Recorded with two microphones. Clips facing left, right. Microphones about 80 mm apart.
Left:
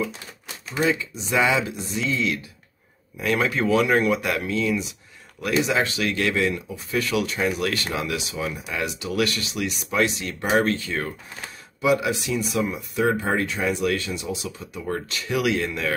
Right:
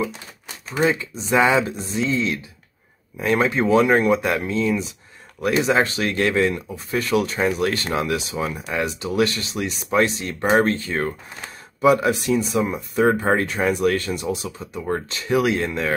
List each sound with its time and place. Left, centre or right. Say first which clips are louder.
0.7 s speech: right 3 dB; right